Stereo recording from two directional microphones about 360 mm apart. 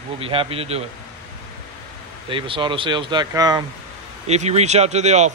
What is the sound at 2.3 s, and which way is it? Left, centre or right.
Speech, centre.